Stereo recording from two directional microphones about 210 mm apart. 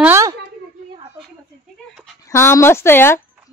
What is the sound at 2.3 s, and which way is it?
Speech, 10° left (ahead or behind).